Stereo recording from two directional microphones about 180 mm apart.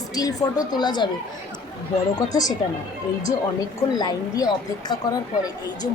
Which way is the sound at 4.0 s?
20° left (ahead or behind).